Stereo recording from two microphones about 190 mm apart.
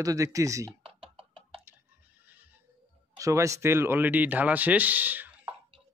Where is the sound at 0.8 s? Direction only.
30° right (ahead or behind).